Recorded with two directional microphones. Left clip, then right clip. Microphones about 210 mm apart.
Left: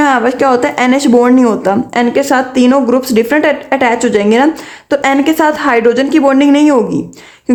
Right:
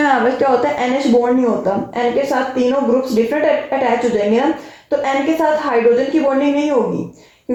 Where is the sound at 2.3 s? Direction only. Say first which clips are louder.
Left 6 dB; 55° left (ahead or behind).